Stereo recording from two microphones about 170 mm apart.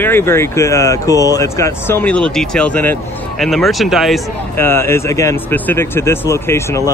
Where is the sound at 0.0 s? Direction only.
15° left (ahead or behind).